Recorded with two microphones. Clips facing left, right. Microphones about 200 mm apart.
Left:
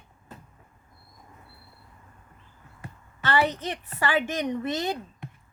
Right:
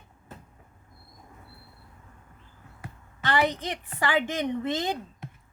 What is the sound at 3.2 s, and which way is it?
A woman's voice, 15° right (ahead or behind).